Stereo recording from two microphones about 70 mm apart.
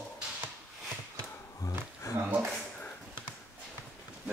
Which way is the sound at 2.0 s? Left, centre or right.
Left.